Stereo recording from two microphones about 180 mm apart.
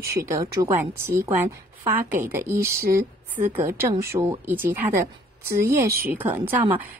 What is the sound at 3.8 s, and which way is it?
A woman's voice, 15° right (ahead or behind).